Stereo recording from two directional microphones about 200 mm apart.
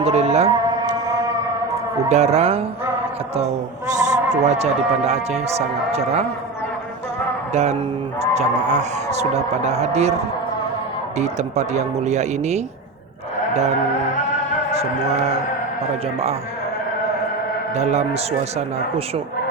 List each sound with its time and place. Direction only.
0.0 s a sound: 30° right (ahead or behind)
1.0 s a sound: 15° right (ahead or behind)
2.0 s speech: 35° right (ahead or behind)
7.5 s speech: 35° right (ahead or behind)
11.2 s speech: 35° right (ahead or behind)
13.5 s music: 35° right (ahead or behind)
17.7 s speech: 35° right (ahead or behind)